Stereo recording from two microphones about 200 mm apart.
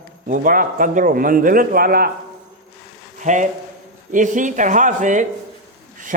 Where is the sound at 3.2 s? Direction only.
40° right (ahead or behind).